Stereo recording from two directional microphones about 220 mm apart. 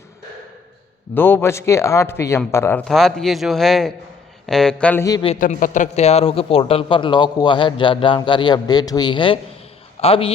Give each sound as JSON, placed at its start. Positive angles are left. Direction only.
{"t": 1.1, "sound": "speech", "side_deg": 10}
{"t": 5.3, "sound": "a man's voice", "side_deg": 35}